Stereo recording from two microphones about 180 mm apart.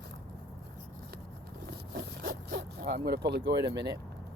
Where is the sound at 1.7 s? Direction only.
60° right (ahead or behind).